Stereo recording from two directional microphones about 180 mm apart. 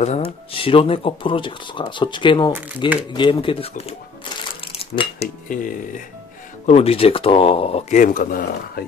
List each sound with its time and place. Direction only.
0.0 s speech: 35° left (ahead or behind)
4.6 s coin: 30° left (ahead or behind)
5.5 s speech: 50° left (ahead or behind)
6.6 s speech: 35° left (ahead or behind); by 8.8 s 50° left (ahead or behind)